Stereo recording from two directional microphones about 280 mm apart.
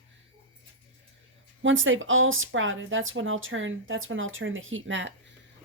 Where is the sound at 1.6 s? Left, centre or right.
Right.